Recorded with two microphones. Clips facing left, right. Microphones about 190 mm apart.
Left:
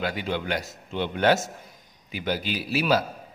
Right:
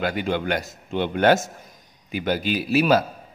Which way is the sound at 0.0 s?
55° right (ahead or behind).